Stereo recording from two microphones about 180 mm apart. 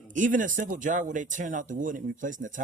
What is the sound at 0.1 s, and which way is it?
Speech, 45° right (ahead or behind).